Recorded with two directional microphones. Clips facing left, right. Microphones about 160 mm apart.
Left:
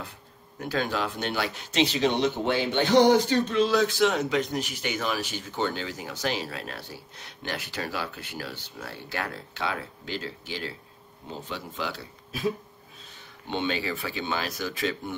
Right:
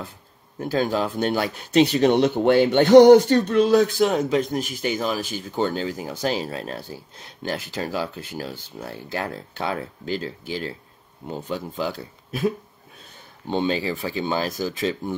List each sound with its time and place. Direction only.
0.6 s speech: 40° right (ahead or behind)
7.8 s speech: 40° right (ahead or behind)
8.7 s speech: 25° right (ahead or behind)
9.6 s speech: 40° right (ahead or behind)
13.5 s speech: 35° right (ahead or behind)